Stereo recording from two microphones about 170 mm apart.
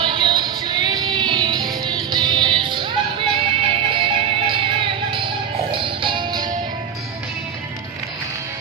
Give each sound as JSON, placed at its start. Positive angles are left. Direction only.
{"t": 0.0, "sound": "music", "side_deg": -30}